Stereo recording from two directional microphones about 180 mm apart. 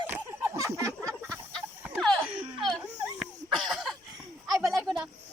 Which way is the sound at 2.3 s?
5° right (ahead or behind).